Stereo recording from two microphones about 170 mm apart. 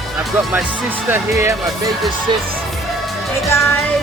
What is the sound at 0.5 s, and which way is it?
Speech, 10° right (ahead or behind).